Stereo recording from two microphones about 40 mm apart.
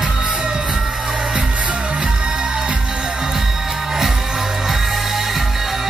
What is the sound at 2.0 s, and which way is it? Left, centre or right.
Music, right.